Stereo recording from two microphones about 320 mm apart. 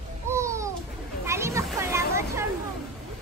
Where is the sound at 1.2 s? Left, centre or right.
Centre.